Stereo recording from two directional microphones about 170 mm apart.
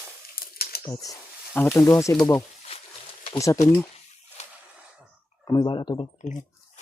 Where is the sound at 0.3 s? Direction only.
65° left (ahead or behind).